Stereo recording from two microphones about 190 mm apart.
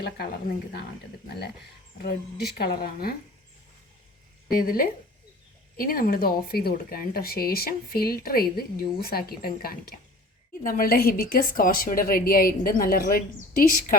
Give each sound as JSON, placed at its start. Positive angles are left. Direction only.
{"t": 0.0, "sound": "speech", "side_deg": 55}
{"t": 2.6, "sound": "speech", "side_deg": 50}
{"t": 4.5, "sound": "speech", "side_deg": 50}